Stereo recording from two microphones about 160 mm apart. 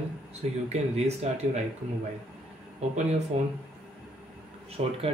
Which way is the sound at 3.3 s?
40° right (ahead or behind).